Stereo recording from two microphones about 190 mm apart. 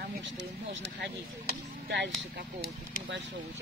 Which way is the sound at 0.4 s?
65° right (ahead or behind).